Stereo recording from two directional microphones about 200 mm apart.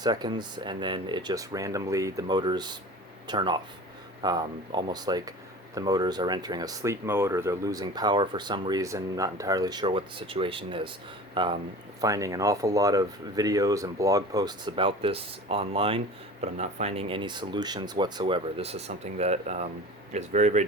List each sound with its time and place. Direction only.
0.0 s speech: 20° right (ahead or behind)